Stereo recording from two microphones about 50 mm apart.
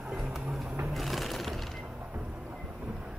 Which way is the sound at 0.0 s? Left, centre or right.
Right.